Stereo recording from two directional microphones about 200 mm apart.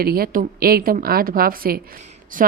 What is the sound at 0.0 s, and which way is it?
A woman's voice, 50° right (ahead or behind).